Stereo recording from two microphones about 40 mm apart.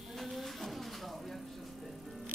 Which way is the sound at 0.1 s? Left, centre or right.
Centre.